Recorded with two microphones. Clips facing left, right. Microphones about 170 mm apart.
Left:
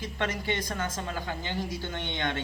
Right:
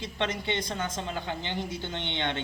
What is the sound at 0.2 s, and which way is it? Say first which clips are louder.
Speech: right 1 dB; 25° right (ahead or behind).